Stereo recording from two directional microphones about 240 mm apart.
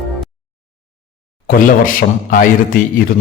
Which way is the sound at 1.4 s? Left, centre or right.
Left.